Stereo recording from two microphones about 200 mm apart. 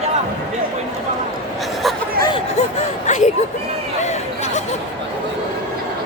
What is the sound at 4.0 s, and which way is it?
Chatter, 35° left (ahead or behind).